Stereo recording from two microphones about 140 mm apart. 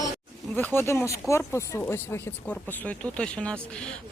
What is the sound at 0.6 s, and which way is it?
A woman's voice, 15° left (ahead or behind).